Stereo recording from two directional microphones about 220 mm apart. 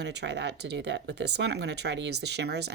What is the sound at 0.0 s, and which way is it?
Speech, 50° right (ahead or behind).